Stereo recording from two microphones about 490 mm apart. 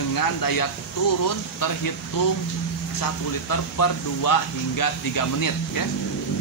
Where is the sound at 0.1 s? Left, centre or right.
Left.